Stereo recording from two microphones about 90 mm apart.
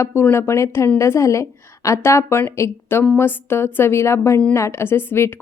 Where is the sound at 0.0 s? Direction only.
25° left (ahead or behind).